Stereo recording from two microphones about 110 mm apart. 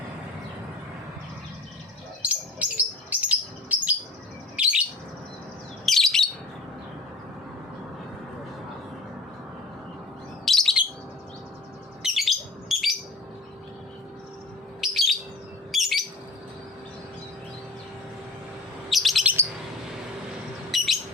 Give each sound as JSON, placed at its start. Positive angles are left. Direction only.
{"t": 2.3, "sound": "bird", "side_deg": -10}
{"t": 5.8, "sound": "bird", "side_deg": 5}
{"t": 10.4, "sound": "bird", "side_deg": 5}
{"t": 12.0, "sound": "bird", "side_deg": 0}
{"t": 14.8, "sound": "bird", "side_deg": 0}
{"t": 18.9, "sound": "bird", "side_deg": 0}
{"t": 19.2, "sound": "bird", "side_deg": -15}
{"t": 20.7, "sound": "bird", "side_deg": 0}